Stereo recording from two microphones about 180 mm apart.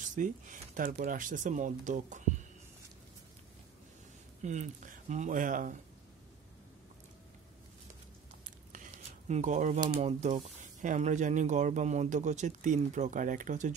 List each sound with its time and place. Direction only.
0.0 s speech: 45° right (ahead or behind)
4.4 s speech: 40° right (ahead or behind)
9.3 s speech: 40° right (ahead or behind)